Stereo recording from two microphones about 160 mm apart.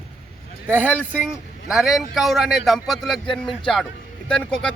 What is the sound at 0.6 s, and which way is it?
Speech, 10° right (ahead or behind).